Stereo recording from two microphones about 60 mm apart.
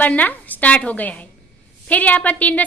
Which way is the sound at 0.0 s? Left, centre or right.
Left.